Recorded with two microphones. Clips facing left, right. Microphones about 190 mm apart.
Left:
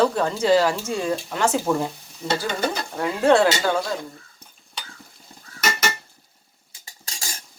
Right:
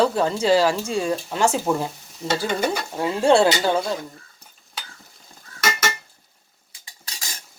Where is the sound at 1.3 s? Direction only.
25° right (ahead or behind).